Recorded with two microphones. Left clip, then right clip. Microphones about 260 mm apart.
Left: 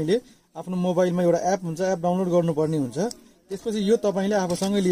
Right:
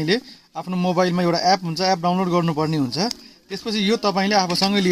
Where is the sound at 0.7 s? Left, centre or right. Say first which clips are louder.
Right 2 dB; right.